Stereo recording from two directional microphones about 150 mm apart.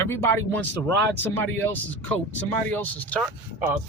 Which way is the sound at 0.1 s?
15° left (ahead or behind).